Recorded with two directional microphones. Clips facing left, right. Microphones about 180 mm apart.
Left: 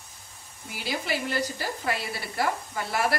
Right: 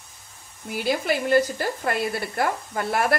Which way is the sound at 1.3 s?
50° right (ahead or behind).